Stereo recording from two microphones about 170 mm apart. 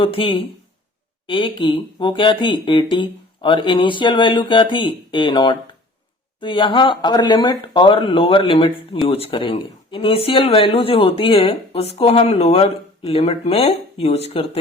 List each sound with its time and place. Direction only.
0.0 s speech: 30° left (ahead or behind)